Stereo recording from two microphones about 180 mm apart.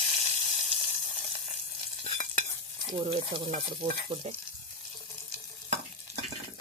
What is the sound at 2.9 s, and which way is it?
Speech, 30° right (ahead or behind).